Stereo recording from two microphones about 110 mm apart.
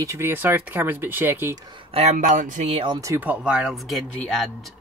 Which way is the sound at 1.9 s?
80° right.